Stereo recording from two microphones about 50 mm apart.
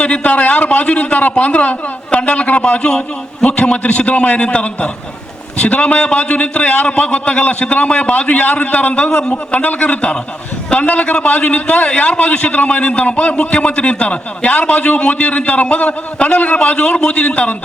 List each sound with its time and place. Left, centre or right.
0.0 s a man's voice: left
9.3 s a man's voice: left